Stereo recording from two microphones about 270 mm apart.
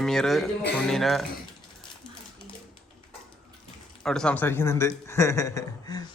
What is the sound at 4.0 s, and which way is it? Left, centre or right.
A man's voice, centre.